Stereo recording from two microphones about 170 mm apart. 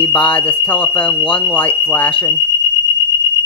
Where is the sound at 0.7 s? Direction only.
10° left (ahead or behind).